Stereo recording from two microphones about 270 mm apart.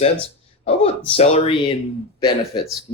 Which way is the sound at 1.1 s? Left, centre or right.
Left.